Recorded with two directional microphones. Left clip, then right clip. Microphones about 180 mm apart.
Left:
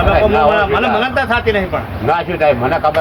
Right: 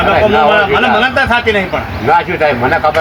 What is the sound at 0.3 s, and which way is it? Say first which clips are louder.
A man's voice: right 3 dB; centre (ahead or behind).